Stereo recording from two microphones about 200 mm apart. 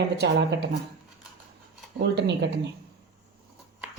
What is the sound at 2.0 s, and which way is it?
Speech, 60° right (ahead or behind).